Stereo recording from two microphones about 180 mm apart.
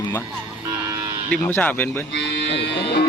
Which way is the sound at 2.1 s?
75° left (ahead or behind).